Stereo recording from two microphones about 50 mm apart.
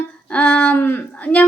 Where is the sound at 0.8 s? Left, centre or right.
Left.